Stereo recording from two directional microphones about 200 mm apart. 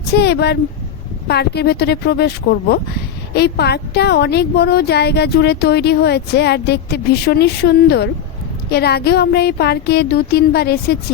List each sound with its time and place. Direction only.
0.1 s speech: 55° left (ahead or behind)